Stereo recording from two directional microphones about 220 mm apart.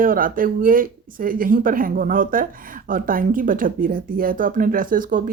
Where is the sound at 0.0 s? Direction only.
40° right (ahead or behind).